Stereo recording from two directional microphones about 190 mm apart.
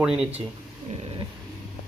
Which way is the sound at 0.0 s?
5° right (ahead or behind).